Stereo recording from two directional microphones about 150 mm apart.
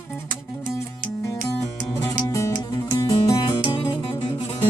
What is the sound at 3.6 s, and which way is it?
Music, 35° left (ahead or behind).